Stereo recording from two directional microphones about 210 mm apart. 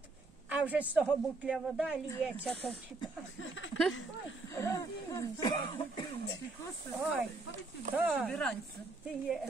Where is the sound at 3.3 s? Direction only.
65° left (ahead or behind).